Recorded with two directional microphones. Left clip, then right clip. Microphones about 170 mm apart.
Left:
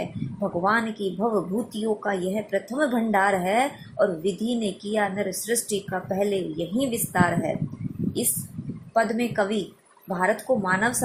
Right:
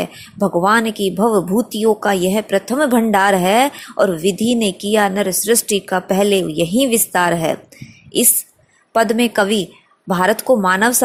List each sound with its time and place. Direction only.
0.0 s speech: 45° right (ahead or behind)
8.9 s speech: 50° right (ahead or behind)